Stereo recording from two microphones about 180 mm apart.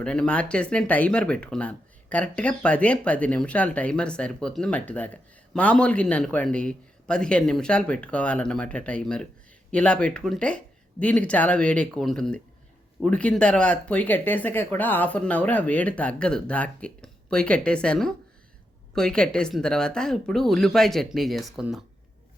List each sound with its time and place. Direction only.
0.0 s speech: 5° left (ahead or behind)